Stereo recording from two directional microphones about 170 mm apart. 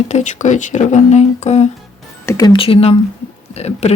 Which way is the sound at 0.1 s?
45° left (ahead or behind).